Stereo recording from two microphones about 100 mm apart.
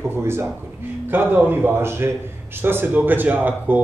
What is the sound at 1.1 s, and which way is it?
A man's voice, 20° right (ahead or behind).